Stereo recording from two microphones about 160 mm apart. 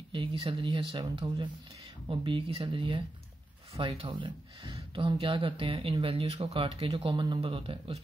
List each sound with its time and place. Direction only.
0.1 s speech: 35° right (ahead or behind)